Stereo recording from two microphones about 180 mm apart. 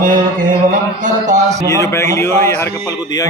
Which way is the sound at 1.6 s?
15° left (ahead or behind).